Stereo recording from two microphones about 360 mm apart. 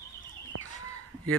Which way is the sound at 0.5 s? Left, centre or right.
Right.